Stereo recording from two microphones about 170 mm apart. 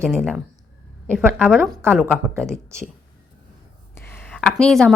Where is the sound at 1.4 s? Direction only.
5° left (ahead or behind).